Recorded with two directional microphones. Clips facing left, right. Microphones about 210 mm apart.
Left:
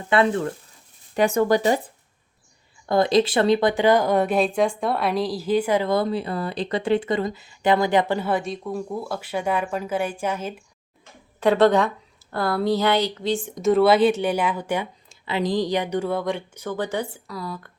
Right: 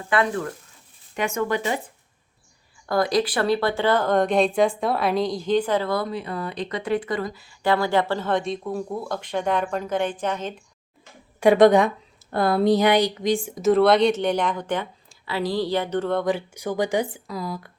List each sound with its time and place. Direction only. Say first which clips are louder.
0.1 s speech: left 3 dB; 25° left (ahead or behind)
2.8 s speech: left 3 dB; 25° left (ahead or behind); by 10.5 s 10° left (ahead or behind)
11.3 s speech: right 3 dB; 15° right (ahead or behind)
13.6 s speech: left 1 dB; centre (ahead or behind)
15.1 s speech: left 2 dB; 20° left (ahead or behind)
16.2 s speech: right 2 dB; 10° right (ahead or behind)